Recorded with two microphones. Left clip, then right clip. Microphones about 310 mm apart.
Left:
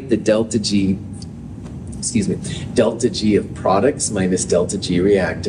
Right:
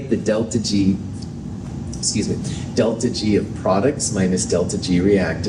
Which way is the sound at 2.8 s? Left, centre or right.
Left.